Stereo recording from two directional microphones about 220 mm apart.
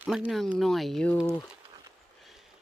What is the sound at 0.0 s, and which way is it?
Speech, 5° right (ahead or behind).